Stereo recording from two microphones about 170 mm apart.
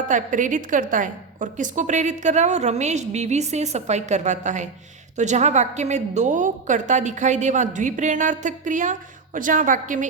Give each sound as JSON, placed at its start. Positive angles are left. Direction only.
{"t": 0.1, "sound": "a woman's voice", "side_deg": -50}